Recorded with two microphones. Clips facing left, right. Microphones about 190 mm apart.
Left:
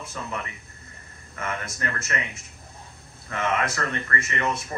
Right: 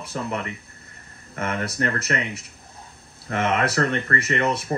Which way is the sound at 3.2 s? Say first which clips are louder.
Right 4 dB; 40° right (ahead or behind).